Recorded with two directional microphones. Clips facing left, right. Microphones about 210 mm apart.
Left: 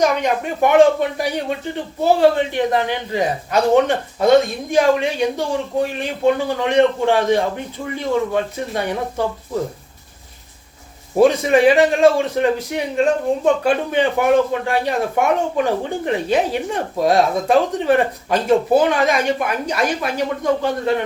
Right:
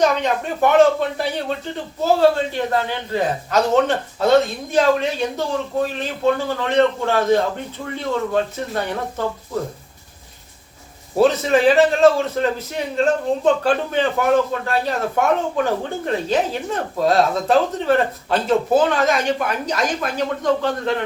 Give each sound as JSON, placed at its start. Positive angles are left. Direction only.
{"t": 0.0, "sound": "a man's voice", "side_deg": 10}
{"t": 11.2, "sound": "a man's voice", "side_deg": 15}